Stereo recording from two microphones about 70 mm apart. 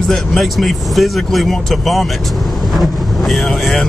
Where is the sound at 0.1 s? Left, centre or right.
Centre.